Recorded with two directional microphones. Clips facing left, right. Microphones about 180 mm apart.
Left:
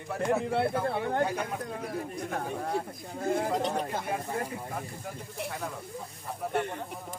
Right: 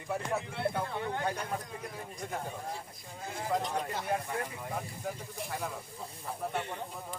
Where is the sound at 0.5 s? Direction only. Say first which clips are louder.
Left 6 dB; 65° left (ahead or behind).